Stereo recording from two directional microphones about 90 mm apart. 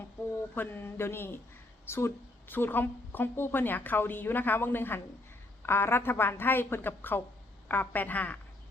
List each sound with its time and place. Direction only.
0.2 s a woman's voice: 25° left (ahead or behind)